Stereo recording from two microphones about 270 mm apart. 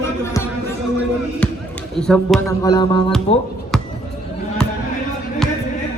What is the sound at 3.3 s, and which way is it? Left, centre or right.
Speech, left.